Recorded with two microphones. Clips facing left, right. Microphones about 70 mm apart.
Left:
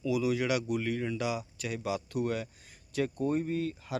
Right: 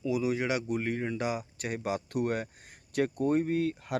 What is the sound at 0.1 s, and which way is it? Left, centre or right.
Speech, right.